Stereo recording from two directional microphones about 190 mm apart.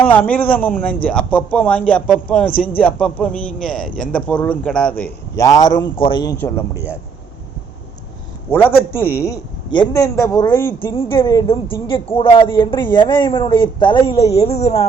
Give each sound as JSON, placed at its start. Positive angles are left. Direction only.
{"t": 0.0, "sound": "a man's voice", "side_deg": 10}
{"t": 6.3, "sound": "a man's voice", "side_deg": 10}
{"t": 6.7, "sound": "speech", "side_deg": -10}
{"t": 8.4, "sound": "a man's voice", "side_deg": 10}